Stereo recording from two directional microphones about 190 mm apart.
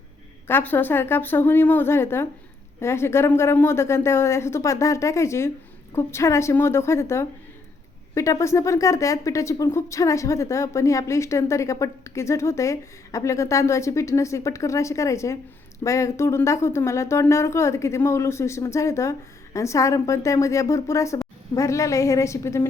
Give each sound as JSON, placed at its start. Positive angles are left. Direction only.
{"t": 0.4, "sound": "speech", "side_deg": 10}